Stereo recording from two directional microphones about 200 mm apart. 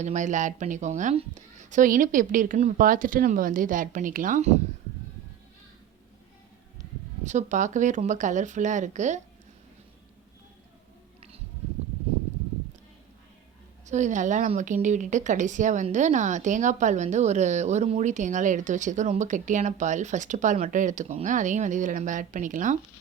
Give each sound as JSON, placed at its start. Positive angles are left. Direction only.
{"t": 0.0, "sound": "a woman's voice", "side_deg": -35}
{"t": 7.3, "sound": "a woman's voice", "side_deg": -35}
{"t": 13.8, "sound": "a woman's voice", "side_deg": -35}